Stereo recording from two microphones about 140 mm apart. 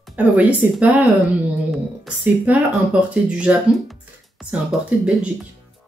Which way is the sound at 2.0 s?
10° right (ahead or behind).